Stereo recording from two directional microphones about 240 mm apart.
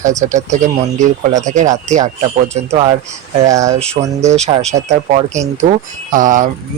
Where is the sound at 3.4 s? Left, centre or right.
Centre.